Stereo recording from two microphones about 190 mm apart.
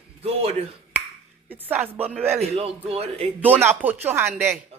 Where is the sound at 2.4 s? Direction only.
35° right (ahead or behind).